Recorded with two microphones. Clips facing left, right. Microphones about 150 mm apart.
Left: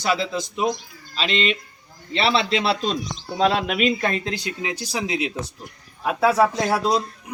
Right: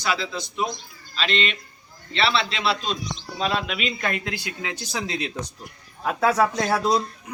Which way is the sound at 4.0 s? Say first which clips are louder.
Left 3 dB; 30° left (ahead or behind).